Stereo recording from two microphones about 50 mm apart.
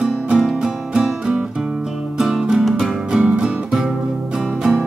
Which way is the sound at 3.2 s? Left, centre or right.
Right.